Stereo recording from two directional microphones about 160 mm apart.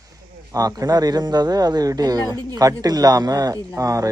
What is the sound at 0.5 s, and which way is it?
Speech, 20° right (ahead or behind).